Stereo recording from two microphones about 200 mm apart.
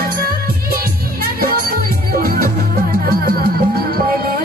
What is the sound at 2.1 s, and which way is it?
Music, 45° right (ahead or behind).